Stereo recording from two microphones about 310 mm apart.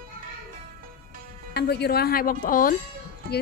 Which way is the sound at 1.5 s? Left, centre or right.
Left.